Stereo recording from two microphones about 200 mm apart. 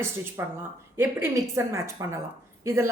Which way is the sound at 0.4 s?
15° right (ahead or behind).